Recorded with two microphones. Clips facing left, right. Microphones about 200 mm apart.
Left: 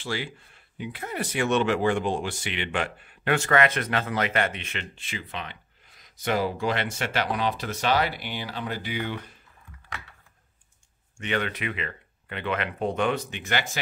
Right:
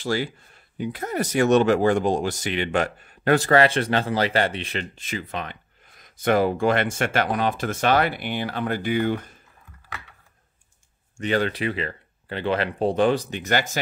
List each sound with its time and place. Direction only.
0.0 s speech: 40° right (ahead or behind)
11.1 s speech: 35° right (ahead or behind)